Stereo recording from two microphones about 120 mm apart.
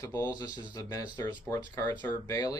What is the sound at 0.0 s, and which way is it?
Speech, 35° left (ahead or behind).